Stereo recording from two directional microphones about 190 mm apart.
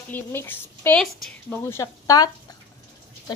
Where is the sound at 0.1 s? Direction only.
10° left (ahead or behind).